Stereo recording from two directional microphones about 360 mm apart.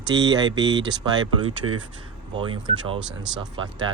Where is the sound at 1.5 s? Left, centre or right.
Right.